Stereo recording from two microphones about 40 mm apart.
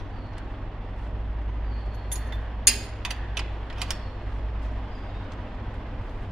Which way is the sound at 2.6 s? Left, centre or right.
Centre.